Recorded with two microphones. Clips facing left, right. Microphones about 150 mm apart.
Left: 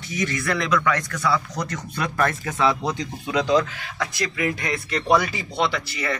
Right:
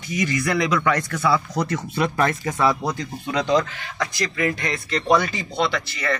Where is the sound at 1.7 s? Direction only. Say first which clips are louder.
Right 5 dB; 5° right (ahead or behind).